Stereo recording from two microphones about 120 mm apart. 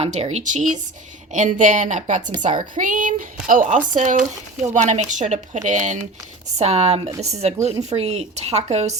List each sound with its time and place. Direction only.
0.0 s a woman's voice: 65° right (ahead or behind); by 4.2 s 90° right
4.7 s speech: 80° right
6.6 s a woman's voice: 65° right (ahead or behind)